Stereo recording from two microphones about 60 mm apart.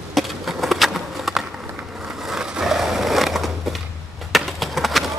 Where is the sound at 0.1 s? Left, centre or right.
Centre.